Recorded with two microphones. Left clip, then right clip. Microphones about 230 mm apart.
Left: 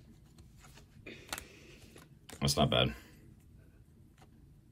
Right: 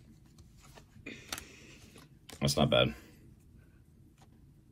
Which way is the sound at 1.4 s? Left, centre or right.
Right.